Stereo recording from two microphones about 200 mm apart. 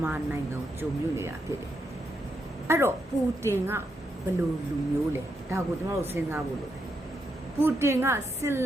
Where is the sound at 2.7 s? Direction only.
15° right (ahead or behind).